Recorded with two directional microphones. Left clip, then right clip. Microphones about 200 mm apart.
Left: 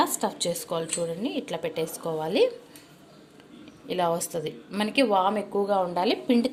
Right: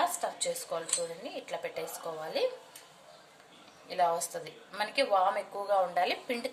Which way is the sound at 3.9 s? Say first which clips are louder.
Left 3 dB; 40° left (ahead or behind).